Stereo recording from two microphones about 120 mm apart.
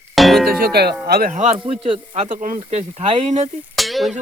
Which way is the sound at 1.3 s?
90° right.